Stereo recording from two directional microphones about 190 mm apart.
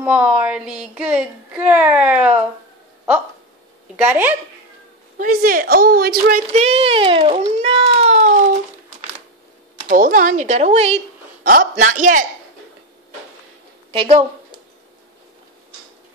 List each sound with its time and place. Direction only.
0.0 s speech: 5° right (ahead or behind)
3.9 s speech: 10° right (ahead or behind)
5.1 s a woman's voice: 50° right (ahead or behind)
6.5 s speech: 35° right (ahead or behind)
9.8 s speech: 45° right (ahead or behind)
11.4 s a woman's voice: 50° right (ahead or behind)
13.9 s a woman's voice: 30° right (ahead or behind)